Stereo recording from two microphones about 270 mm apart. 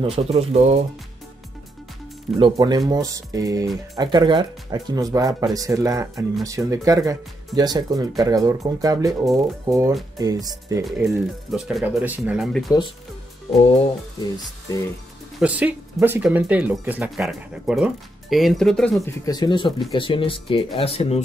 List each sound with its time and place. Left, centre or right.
0.0 s speech: right
2.4 s speech: centre
13.5 s music: centre
15.3 s speech: centre
19.2 s music: centre
19.9 s speech: centre